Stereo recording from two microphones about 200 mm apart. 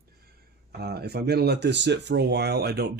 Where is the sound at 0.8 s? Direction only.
55° right (ahead or behind).